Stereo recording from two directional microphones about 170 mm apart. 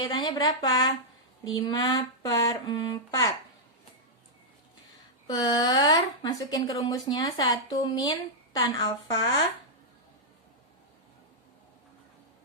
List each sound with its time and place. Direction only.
0.0 s speech: 25° left (ahead or behind)
5.3 s speech: 25° left (ahead or behind)